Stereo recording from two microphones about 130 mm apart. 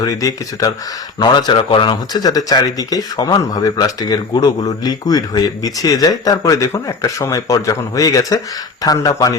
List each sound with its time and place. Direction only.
0.0 s speech: 30° left (ahead or behind)